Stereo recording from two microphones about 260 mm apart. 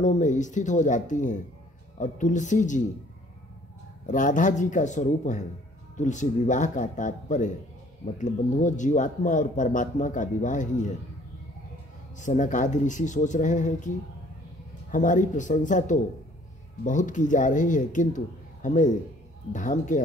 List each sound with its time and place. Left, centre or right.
0.0 s speech: left
4.0 s speech: left
12.2 s speech: left